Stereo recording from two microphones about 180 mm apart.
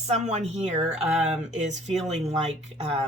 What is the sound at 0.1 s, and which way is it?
Speech, 40° right (ahead or behind).